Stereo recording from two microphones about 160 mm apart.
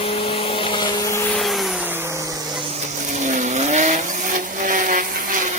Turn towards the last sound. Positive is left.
turn(degrees=-55)  # may be behind; listen again after turning